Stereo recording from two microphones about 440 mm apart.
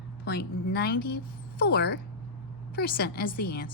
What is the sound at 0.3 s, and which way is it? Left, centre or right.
A woman's voice, left.